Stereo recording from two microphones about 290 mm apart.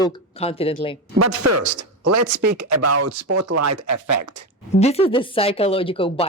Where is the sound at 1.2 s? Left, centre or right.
Right.